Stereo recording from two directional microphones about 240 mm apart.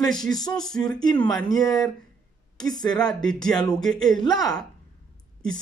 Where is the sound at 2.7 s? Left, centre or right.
Centre.